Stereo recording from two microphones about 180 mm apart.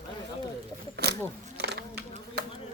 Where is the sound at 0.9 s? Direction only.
65° right (ahead or behind).